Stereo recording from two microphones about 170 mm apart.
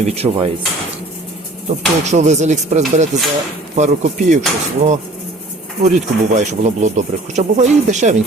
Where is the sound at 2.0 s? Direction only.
45° right (ahead or behind).